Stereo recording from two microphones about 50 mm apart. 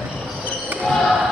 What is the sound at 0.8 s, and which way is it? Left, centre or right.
Basketball bounce, centre.